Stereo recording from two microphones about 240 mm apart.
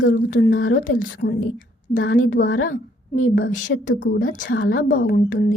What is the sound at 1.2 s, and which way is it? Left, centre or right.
Speech, left.